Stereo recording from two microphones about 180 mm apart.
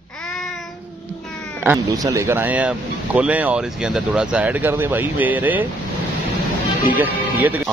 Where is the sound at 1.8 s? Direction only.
20° right (ahead or behind).